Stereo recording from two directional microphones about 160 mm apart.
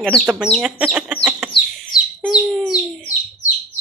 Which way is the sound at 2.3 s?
5° right (ahead or behind).